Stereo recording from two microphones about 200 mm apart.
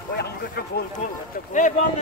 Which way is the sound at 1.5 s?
40° left (ahead or behind).